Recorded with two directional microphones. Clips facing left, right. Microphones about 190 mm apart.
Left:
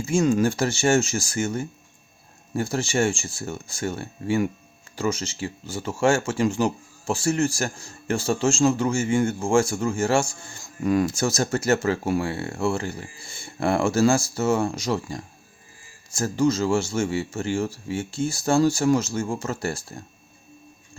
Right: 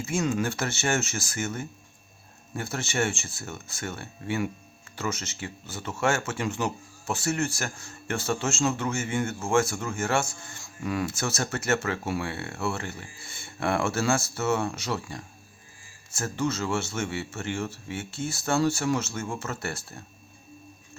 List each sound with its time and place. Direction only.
0.0 s speech: 30° left (ahead or behind)
2.7 s speech: 30° left (ahead or behind)
10.8 s speech: 45° left (ahead or behind)